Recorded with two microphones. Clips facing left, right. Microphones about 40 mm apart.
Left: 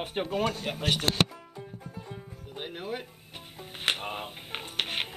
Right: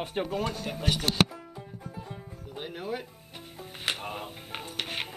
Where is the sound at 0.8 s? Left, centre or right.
Left.